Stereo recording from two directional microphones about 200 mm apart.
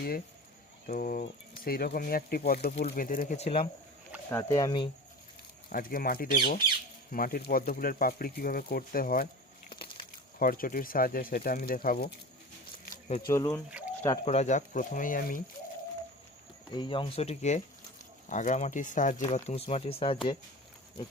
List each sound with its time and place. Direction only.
0.9 s speech: 45° left (ahead or behind)
4.3 s speech: 15° left (ahead or behind)
5.6 s speech: 45° left (ahead or behind)
9.6 s a sound: 25° left (ahead or behind)
10.3 s speech: 45° left (ahead or behind)
13.2 s speech: 15° left (ahead or behind)
13.7 s a sound: 5° right (ahead or behind)
14.3 s speech: 35° left (ahead or behind)
16.7 s speech: 25° left (ahead or behind)